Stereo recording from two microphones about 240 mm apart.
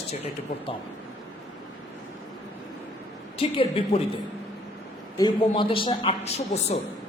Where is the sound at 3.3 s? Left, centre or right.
Left.